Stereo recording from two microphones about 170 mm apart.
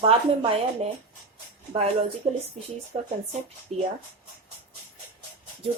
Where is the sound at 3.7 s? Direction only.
40° right (ahead or behind).